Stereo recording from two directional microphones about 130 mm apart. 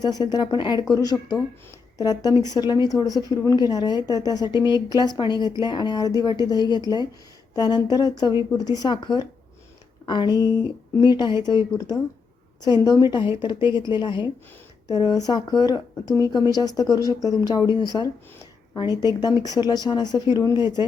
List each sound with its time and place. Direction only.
0.0 s speech: 30° left (ahead or behind)